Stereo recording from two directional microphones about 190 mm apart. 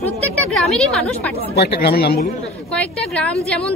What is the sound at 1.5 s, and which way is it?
Speech, 60° left (ahead or behind).